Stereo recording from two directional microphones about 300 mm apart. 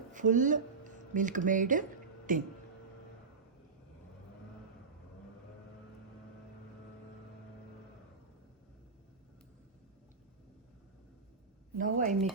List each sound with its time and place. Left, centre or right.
0.1 s a woman's voice: right
11.8 s a woman's voice: right